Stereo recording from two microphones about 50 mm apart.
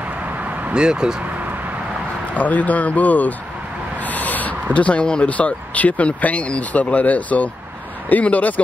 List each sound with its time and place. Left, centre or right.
0.7 s speech: centre
2.3 s speech: left
4.1 s a sound: left
4.7 s speech: left